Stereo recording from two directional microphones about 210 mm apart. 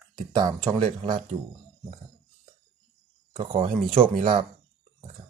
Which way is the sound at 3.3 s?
40° right (ahead or behind).